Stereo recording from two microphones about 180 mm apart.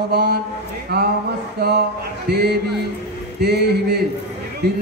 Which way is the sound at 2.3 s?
60° right (ahead or behind).